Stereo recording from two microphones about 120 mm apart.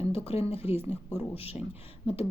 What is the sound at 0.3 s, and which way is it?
Speech, 55° left (ahead or behind).